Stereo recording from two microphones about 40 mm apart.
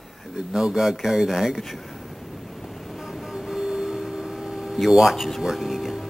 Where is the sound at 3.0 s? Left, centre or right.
Centre.